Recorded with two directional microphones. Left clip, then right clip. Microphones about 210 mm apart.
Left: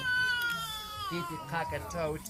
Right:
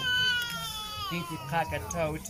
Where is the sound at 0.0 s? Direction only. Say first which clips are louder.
Right 2 dB; 15° left (ahead or behind).